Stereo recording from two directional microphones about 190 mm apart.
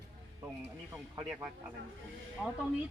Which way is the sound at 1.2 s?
10° right (ahead or behind).